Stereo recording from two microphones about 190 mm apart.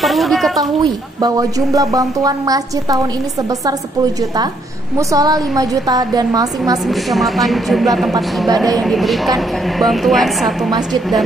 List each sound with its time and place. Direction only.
0.0 s speech: centre (ahead or behind)
0.6 s speech: 20° right (ahead or behind)
6.9 s a woman's voice: centre (ahead or behind)